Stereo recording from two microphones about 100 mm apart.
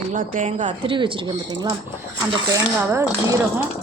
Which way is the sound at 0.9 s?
60° right (ahead or behind).